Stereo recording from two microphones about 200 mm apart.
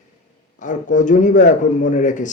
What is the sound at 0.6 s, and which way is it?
Speech, 40° left (ahead or behind).